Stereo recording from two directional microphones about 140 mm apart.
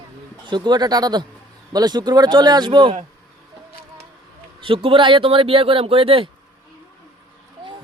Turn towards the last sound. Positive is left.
turn(degrees=-40)  # may be behind; listen again after turning